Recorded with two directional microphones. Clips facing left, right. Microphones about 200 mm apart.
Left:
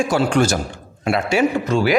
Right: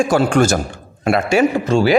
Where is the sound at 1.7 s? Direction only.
30° right (ahead or behind).